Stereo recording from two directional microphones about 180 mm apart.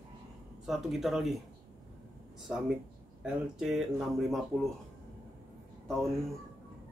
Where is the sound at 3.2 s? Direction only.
Centre (ahead or behind).